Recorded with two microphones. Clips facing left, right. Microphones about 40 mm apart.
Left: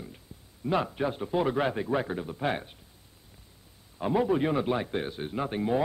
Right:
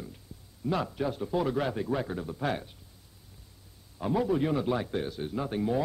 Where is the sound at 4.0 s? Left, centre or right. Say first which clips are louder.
Left 2 dB; left.